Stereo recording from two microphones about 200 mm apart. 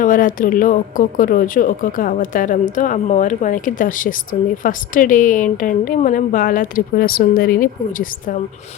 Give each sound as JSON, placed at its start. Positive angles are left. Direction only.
{"t": 0.0, "sound": "speech", "side_deg": 40}